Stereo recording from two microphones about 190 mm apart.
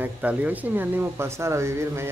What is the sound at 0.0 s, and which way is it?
Speech, 10° right (ahead or behind).